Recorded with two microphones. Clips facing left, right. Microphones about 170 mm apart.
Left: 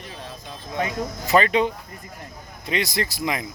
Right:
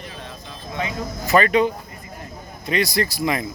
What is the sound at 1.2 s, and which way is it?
Speech, 25° left (ahead or behind).